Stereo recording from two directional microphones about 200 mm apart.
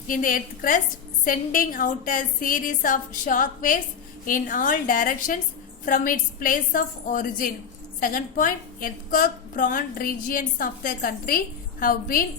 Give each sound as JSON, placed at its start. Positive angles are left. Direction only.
{"t": 0.1, "sound": "a woman's voice", "side_deg": 45}